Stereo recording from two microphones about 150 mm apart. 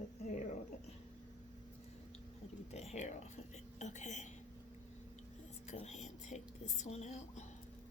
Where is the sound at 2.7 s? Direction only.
50° left (ahead or behind).